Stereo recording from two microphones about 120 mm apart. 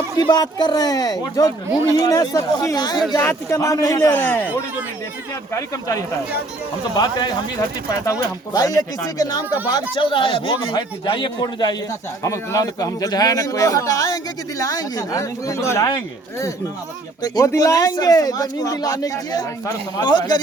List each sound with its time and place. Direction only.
0.2 s speech: 35° left (ahead or behind)
3.2 s speech: 20° left (ahead or behind)
4.1 s speech: 15° left (ahead or behind)
6.9 s speech: 35° left (ahead or behind)
12.2 s speech: 25° left (ahead or behind)
17.2 s speech: 30° left (ahead or behind)